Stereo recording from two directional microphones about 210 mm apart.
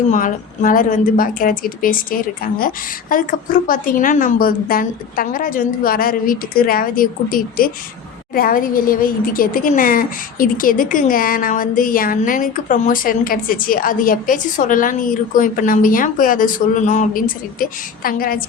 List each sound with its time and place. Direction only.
0.1 s speech: 40° left (ahead or behind)